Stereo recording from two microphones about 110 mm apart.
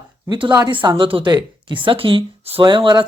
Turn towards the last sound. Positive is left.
turn(degrees=-45)  # may be behind; listen again after turning